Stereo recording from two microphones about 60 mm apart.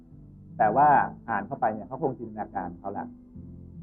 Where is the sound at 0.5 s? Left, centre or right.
Left.